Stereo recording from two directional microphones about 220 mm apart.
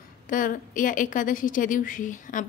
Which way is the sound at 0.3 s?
40° left (ahead or behind).